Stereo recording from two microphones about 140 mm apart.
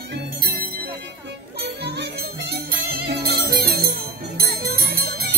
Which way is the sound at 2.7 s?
90° right.